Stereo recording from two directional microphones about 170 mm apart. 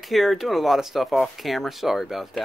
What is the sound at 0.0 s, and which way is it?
Speech, centre (ahead or behind).